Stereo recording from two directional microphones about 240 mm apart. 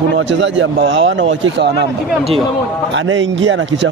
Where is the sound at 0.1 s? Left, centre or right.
Right.